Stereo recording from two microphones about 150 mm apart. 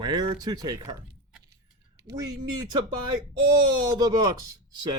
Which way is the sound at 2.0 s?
25° right (ahead or behind).